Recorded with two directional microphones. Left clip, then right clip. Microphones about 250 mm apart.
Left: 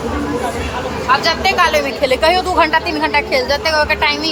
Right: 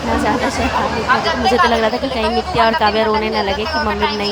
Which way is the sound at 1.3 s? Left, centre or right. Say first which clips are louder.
Even; left.